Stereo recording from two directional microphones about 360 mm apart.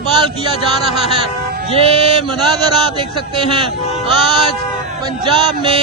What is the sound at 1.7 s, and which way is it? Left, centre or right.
Speech, centre.